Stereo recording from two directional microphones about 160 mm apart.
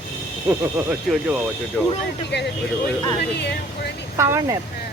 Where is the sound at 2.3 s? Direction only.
90° left.